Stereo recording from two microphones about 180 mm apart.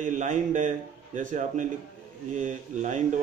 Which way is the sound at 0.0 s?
45° right (ahead or behind).